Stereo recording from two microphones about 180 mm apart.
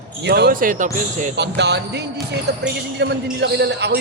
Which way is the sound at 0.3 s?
65° right (ahead or behind).